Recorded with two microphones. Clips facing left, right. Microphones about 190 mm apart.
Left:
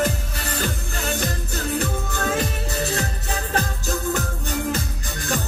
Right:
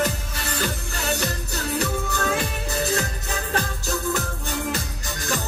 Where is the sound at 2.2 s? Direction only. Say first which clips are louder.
Left 4 dB; 40° left (ahead or behind).